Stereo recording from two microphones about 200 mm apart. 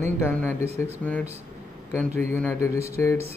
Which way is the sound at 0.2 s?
10° left (ahead or behind).